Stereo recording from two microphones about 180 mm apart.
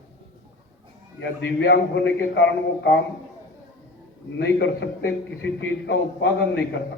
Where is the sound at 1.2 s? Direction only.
80° left.